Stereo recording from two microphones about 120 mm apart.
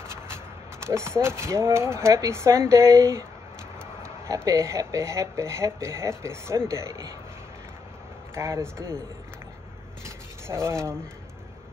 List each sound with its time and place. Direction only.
0.8 s speech: 20° right (ahead or behind)
8.4 s speech: 25° right (ahead or behind)
10.0 s rub: 20° right (ahead or behind)